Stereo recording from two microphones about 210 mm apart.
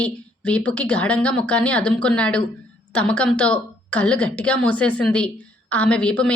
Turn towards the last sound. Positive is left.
turn(degrees=5)  # may be behind; listen again after turning